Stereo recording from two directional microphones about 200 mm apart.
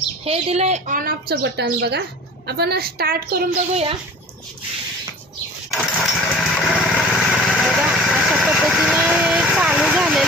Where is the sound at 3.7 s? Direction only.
30° right (ahead or behind).